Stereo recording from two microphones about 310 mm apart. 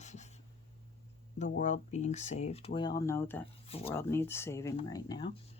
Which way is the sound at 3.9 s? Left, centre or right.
Centre.